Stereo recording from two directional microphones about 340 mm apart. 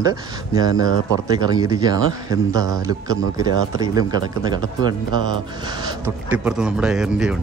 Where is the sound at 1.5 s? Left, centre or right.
Centre.